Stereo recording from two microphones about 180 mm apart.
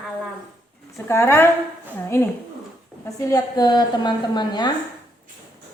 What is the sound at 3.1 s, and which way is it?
A woman's voice, 20° left (ahead or behind).